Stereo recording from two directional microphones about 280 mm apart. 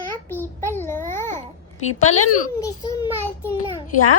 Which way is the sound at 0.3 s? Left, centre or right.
Centre.